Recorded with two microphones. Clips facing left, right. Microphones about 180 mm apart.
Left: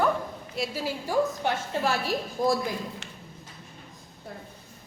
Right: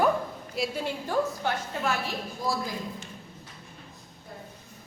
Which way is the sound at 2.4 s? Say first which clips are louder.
Left 6 dB; 50° left (ahead or behind).